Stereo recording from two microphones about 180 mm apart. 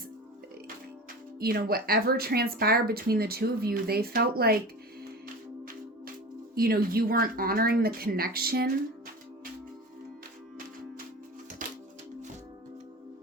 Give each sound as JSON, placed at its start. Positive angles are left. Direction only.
{"t": 1.4, "sound": "speech", "side_deg": -55}
{"t": 6.5, "sound": "speech", "side_deg": -55}
{"t": 11.6, "sound": "music", "side_deg": -50}